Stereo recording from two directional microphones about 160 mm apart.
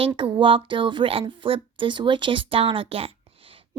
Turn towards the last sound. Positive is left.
turn(degrees=-35)  # may be behind; listen again after turning